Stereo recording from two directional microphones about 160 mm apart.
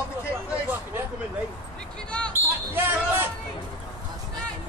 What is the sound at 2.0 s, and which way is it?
Basketball bounce, 5° left (ahead or behind).